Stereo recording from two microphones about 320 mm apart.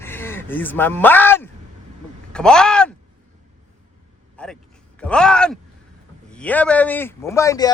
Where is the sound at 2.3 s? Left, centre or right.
Centre.